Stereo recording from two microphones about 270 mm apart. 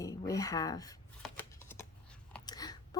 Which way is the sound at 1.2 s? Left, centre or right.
Centre.